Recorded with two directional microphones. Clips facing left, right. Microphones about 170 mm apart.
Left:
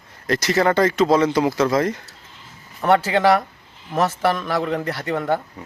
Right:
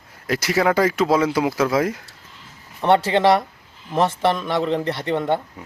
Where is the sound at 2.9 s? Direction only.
30° right (ahead or behind).